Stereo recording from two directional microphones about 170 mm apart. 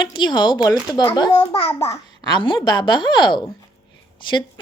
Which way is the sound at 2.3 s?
25° left (ahead or behind).